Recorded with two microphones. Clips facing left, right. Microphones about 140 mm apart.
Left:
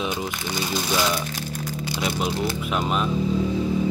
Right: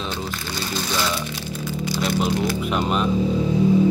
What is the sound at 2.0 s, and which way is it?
Speech, centre (ahead or behind).